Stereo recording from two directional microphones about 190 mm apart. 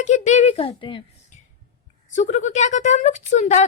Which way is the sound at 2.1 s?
40° left (ahead or behind).